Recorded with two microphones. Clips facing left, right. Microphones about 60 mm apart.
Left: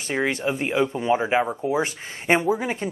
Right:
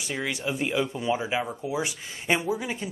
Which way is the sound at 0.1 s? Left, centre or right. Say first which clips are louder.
Left 7 dB; left.